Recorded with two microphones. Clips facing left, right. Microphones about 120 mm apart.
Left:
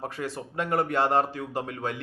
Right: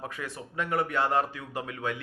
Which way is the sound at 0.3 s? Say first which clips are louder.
Left 2 dB; 35° left (ahead or behind).